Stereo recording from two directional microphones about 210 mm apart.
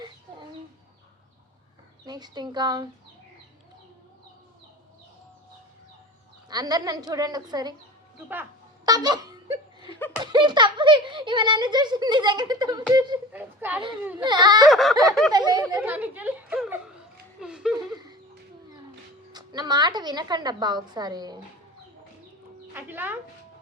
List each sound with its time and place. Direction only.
2.0 s speech: 20° right (ahead or behind)
6.5 s a child's voice: 20° right (ahead or behind)
10.3 s speech: 20° right (ahead or behind)
13.3 s a woman's voice: 10° right (ahead or behind)
14.3 s speech: 20° right (ahead or behind)
14.7 s speech: centre (ahead or behind)
15.3 s speech: 20° right (ahead or behind)
15.8 s a woman's voice: 10° right (ahead or behind)
17.9 s a sound: 20° right (ahead or behind)
19.3 s speech: 20° right (ahead or behind)
22.7 s a woman's voice: 10° right (ahead or behind)